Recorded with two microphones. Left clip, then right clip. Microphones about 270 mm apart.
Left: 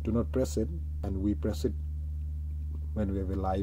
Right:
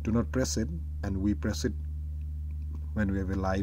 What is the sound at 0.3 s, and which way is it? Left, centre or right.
Speech, right.